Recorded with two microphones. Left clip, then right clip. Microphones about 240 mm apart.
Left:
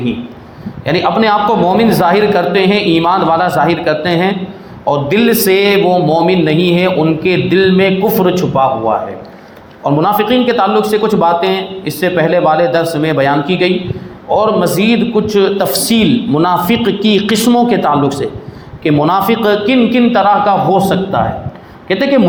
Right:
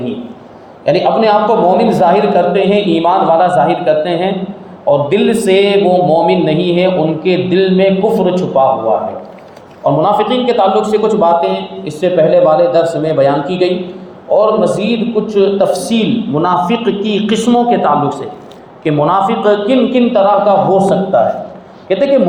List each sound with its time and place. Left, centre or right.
0.9 s a man's voice: left
9.8 s a man's voice: left
21.8 s speech: left